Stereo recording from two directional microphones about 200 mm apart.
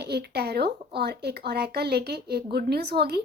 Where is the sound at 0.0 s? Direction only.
55° right (ahead or behind).